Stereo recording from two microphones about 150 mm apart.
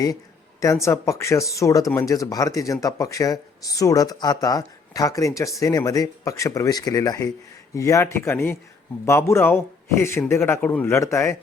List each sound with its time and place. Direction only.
0.6 s a man's voice: 20° left (ahead or behind)